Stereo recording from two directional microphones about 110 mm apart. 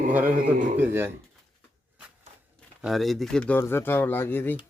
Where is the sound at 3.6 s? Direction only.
20° left (ahead or behind).